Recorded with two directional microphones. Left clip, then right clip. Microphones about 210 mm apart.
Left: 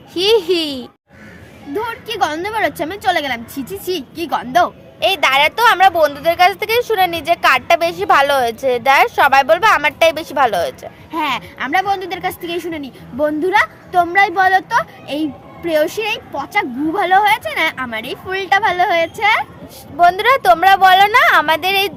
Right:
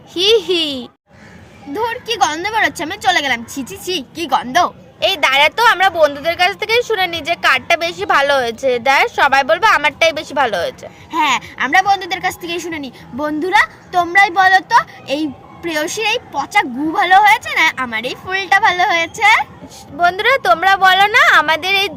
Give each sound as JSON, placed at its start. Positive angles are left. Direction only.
{"t": 0.1, "sound": "a child's voice", "side_deg": 0}
{"t": 1.7, "sound": "a woman's voice", "side_deg": -35}
{"t": 4.9, "sound": "speech", "side_deg": 0}
{"t": 11.1, "sound": "a woman's voice", "side_deg": -35}
{"t": 20.0, "sound": "speech", "side_deg": 0}